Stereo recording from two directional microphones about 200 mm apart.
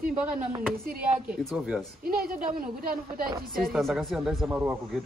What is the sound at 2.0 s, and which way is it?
Speech, 45° right (ahead or behind).